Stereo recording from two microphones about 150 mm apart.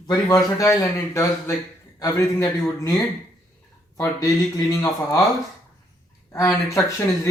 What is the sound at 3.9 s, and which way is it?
Speech, 20° left (ahead or behind).